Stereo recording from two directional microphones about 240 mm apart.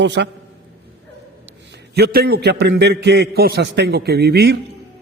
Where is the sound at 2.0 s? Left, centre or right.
Right.